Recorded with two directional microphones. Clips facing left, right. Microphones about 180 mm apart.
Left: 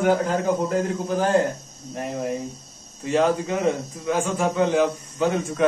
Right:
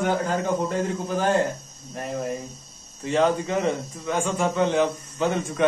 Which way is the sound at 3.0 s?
5° left (ahead or behind).